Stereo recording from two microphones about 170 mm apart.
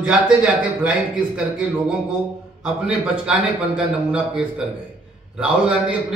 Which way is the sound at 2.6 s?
5° right (ahead or behind).